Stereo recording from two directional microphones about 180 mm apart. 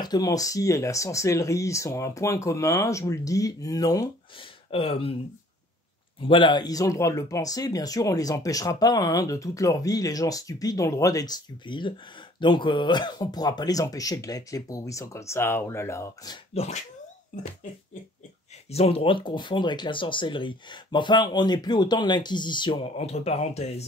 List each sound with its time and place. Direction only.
0.0 s speech: 20° left (ahead or behind)
4.6 s speech: 30° left (ahead or behind)
6.2 s speech: 25° left (ahead or behind)
16.5 s speech: 40° left (ahead or behind)
18.7 s speech: 35° left (ahead or behind)